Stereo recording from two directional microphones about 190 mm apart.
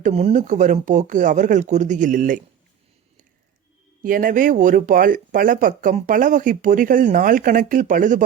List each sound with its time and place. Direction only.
0.0 s speech: 35° right (ahead or behind)
4.0 s speech: 45° right (ahead or behind)